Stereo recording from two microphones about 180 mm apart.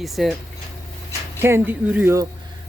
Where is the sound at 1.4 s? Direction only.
10° right (ahead or behind).